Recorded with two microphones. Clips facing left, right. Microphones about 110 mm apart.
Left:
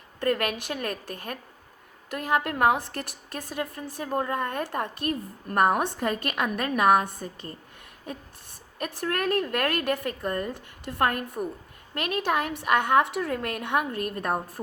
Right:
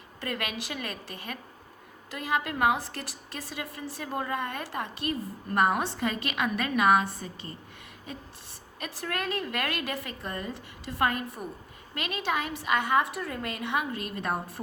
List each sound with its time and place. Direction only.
0.2 s a woman's voice: 50° left (ahead or behind)
8.8 s a woman's voice: 50° left (ahead or behind)